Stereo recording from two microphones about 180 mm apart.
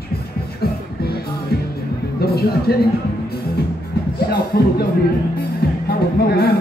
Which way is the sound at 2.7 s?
60° left (ahead or behind).